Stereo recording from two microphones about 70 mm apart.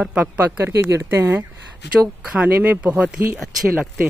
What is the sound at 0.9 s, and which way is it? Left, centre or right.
Speech, right.